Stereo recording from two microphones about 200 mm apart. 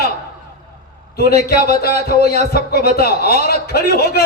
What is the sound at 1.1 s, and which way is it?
A man's voice, 50° left (ahead or behind).